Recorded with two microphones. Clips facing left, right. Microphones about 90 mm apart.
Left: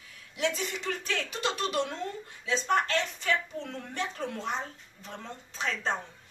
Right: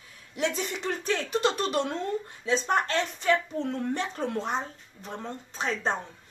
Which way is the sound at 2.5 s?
35° right (ahead or behind).